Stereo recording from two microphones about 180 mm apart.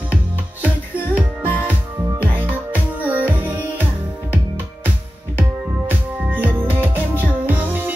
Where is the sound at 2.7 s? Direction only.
10° right (ahead or behind).